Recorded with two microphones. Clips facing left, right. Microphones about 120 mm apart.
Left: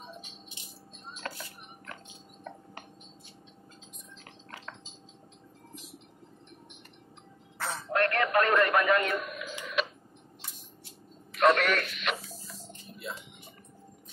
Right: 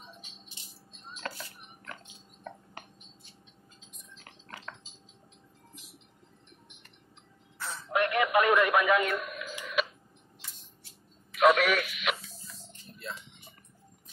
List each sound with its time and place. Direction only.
7.5 s music: 75° left (ahead or behind)
7.9 s a man's voice: 10° right (ahead or behind)
11.3 s radio: 5° right (ahead or behind)
13.0 s music: 5° left (ahead or behind)